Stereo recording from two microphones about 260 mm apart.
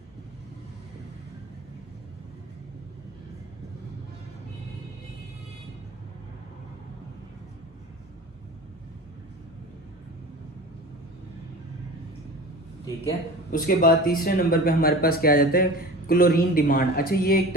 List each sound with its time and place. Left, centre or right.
13.5 s speech: left